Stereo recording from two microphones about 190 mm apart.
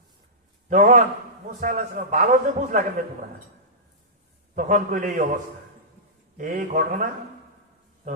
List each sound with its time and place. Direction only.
0.7 s a man's voice: 45° right (ahead or behind)
4.5 s a man's voice: 45° right (ahead or behind)
6.3 s a man's voice: 40° right (ahead or behind)